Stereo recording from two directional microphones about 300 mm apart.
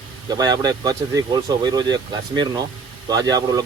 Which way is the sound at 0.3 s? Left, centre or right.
Centre.